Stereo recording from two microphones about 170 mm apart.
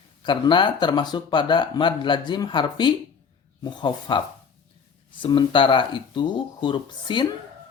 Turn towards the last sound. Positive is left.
turn(degrees=30)  # may be behind; listen again after turning